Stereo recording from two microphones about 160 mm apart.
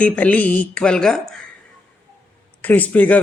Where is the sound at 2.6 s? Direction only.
10° left (ahead or behind).